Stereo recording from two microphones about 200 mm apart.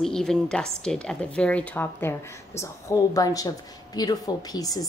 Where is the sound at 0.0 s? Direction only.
Centre (ahead or behind).